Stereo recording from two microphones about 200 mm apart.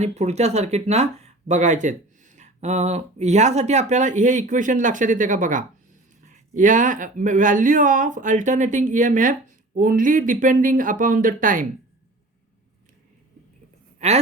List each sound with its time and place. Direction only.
0.0 s speech: 35° right (ahead or behind)
14.0 s speech: 35° right (ahead or behind)